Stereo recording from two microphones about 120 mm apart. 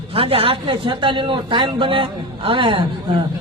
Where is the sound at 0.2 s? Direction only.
50° right (ahead or behind).